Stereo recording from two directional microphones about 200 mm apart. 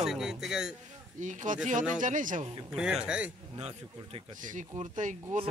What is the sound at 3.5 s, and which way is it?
Speech, 30° right (ahead or behind).